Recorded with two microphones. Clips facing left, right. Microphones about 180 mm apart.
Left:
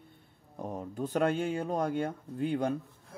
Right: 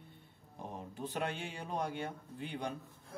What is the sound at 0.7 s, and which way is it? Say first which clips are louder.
Speech: left 9 dB; 45° left (ahead or behind).